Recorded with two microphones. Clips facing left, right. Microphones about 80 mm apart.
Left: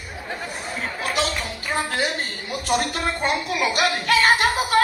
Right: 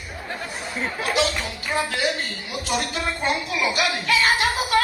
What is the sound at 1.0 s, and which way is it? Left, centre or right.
Speech, left.